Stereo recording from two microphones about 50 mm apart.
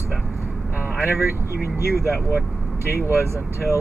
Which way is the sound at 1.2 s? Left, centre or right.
Right.